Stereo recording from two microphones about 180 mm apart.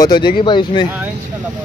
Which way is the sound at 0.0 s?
25° left (ahead or behind).